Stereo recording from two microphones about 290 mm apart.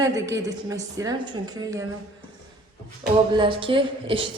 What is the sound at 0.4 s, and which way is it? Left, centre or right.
A woman's voice, centre.